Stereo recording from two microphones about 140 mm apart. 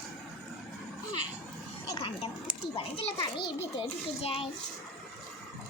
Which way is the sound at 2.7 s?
45° left (ahead or behind).